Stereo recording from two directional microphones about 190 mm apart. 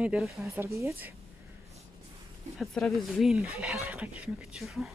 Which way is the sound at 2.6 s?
Centre (ahead or behind).